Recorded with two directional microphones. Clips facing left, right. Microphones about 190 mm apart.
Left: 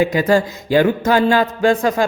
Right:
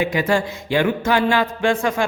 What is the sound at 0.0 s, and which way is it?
Music, 40° left (ahead or behind).